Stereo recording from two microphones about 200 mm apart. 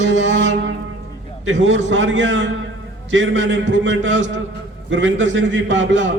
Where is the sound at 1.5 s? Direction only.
65° right (ahead or behind).